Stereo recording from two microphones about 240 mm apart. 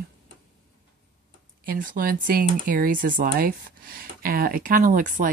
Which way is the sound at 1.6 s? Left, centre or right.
Right.